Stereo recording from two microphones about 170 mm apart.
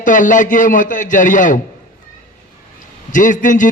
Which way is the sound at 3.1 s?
50° left (ahead or behind).